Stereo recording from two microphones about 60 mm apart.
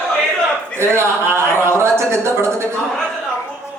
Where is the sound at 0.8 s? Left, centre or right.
Right.